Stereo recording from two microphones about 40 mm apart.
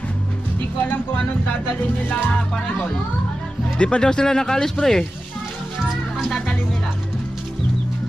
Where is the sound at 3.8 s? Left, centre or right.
Left.